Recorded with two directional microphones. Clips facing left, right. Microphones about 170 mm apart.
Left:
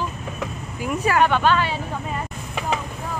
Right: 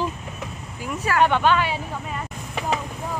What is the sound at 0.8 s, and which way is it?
Speech, 15° left (ahead or behind).